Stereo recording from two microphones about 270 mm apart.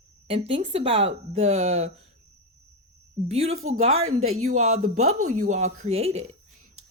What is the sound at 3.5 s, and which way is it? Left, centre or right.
Speech, right.